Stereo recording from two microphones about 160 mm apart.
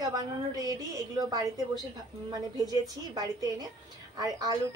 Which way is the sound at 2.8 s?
25° right (ahead or behind).